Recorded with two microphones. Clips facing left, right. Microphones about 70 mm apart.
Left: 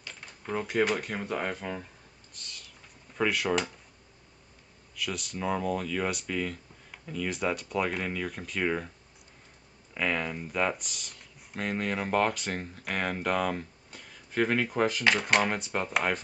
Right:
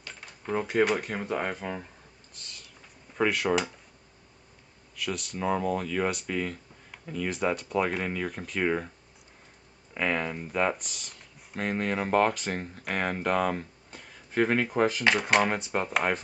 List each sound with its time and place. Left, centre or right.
0.2 s typewriter: centre
0.7 s speech: centre
2.3 s a sound: centre
3.2 s speech: centre
4.9 s speech: centre
9.9 s speech: centre